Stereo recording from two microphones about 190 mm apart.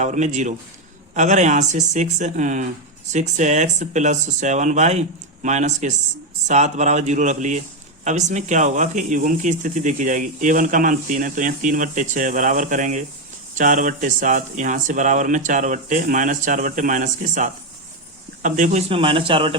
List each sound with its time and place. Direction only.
0.0 s speech: 40° right (ahead or behind)
18.9 s a man's voice: 30° right (ahead or behind)